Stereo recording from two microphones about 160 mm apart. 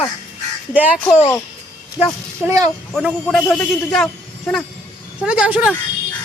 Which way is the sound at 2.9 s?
Centre (ahead or behind).